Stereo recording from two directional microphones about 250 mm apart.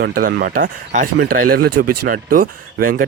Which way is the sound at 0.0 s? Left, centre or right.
Right.